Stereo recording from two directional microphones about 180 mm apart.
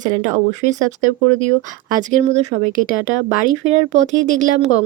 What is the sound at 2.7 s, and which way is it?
A woman's voice, 45° right (ahead or behind).